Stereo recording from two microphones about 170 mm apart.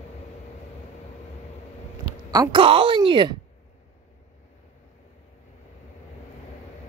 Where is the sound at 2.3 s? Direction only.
25° right (ahead or behind).